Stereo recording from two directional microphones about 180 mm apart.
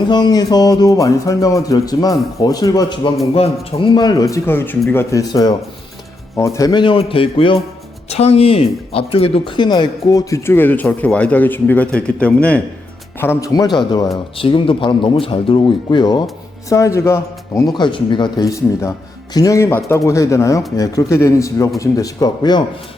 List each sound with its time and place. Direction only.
0.1 s speech: 20° left (ahead or behind)
3.3 s speech: 35° left (ahead or behind)